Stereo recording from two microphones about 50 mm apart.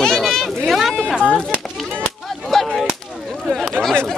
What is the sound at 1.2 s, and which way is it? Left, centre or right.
Speech, left.